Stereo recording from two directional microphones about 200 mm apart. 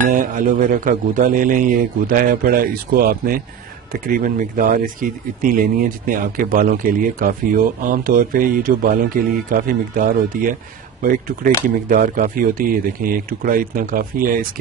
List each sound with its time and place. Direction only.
0.1 s speech: 40° right (ahead or behind)